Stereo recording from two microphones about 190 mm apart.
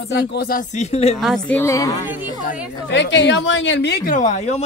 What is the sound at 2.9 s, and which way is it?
A woman's voice, 70° left (ahead or behind).